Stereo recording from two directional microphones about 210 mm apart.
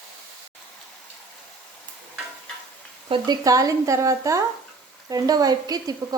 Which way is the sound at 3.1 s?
20° right (ahead or behind).